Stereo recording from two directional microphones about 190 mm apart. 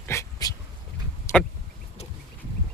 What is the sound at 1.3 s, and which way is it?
Vehicle, 15° left (ahead or behind).